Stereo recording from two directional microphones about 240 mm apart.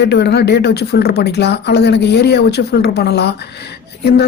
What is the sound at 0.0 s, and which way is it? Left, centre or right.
Speech, left.